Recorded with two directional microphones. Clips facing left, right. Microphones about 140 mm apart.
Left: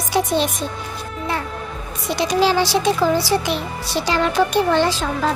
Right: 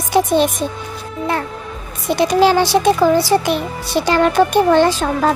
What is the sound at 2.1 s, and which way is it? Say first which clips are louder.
A child's voice: right 5 dB; 55° right (ahead or behind).